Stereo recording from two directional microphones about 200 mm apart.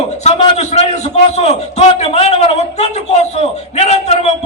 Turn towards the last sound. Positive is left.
turn(degrees=30)  # may be behind; listen again after turning